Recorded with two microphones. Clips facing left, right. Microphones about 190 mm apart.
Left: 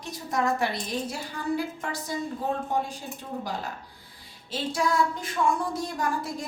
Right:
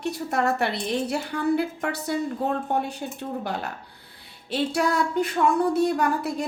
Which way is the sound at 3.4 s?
65° right (ahead or behind).